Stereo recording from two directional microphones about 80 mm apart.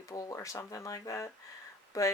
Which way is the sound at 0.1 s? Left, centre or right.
Left.